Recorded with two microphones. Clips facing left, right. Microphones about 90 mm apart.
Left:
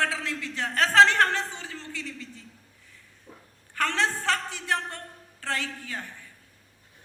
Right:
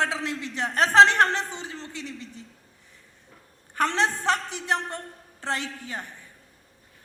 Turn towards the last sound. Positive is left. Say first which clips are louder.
# right 1 dB
turn(degrees=-20)  # may be behind; listen again after turning